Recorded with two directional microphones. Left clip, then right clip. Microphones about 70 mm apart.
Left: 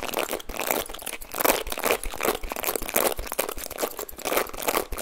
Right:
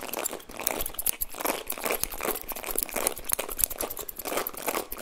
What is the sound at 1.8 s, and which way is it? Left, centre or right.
Tearing, left.